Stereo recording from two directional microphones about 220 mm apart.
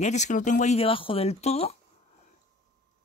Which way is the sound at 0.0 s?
30° left (ahead or behind).